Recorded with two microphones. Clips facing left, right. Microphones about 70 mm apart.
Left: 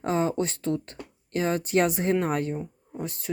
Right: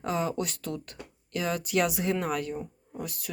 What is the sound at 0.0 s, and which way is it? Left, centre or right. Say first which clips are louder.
Speech: left 4 dB; left.